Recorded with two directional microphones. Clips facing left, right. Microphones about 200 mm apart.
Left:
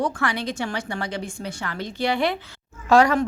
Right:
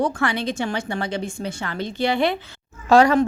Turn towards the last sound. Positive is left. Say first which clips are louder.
# right 2 dB
turn(degrees=-30)  # may be behind; listen again after turning